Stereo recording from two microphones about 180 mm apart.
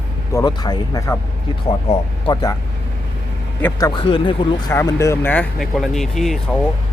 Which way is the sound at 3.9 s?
25° left (ahead or behind).